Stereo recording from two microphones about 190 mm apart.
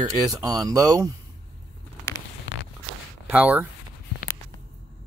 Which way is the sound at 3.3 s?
10° right (ahead or behind).